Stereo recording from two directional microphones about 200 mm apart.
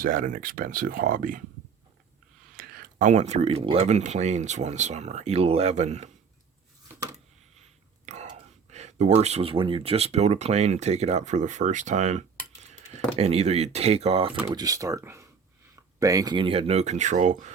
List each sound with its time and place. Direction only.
0.0 s speech: 40° right (ahead or behind)
2.6 s speech: 45° right (ahead or behind)
7.5 s whispering: 35° right (ahead or behind)
8.7 s speech: 35° right (ahead or behind)
14.4 s speech: 20° right (ahead or behind); by 17.5 s 40° right (ahead or behind)